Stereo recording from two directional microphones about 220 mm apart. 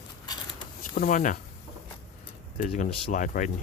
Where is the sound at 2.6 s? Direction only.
35° left (ahead or behind).